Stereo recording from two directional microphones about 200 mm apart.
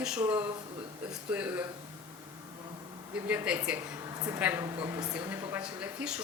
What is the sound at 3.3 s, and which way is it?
Speech, 5° right (ahead or behind).